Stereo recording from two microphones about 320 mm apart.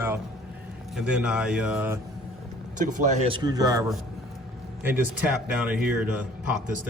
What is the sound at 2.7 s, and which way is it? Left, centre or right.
Speech, right.